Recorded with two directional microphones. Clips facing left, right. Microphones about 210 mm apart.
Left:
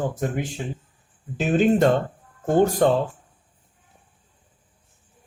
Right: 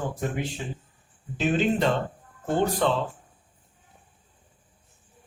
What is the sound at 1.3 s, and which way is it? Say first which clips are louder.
A man's voice: left 5 dB; 45° left (ahead or behind).